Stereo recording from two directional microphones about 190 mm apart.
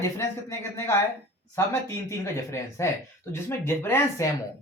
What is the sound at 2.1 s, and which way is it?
Speech, 15° left (ahead or behind).